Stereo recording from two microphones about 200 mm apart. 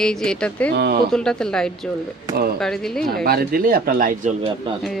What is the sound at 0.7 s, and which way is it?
Speech, 55° right (ahead or behind).